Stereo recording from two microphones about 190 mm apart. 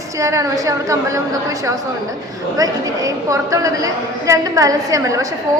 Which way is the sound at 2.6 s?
20° right (ahead or behind).